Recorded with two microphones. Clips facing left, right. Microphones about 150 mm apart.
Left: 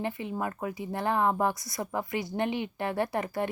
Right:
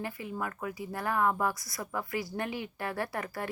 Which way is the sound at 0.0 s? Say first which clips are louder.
Left 4 dB; 25° left (ahead or behind).